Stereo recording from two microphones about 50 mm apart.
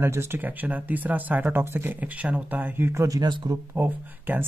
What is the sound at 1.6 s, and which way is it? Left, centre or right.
Speech, right.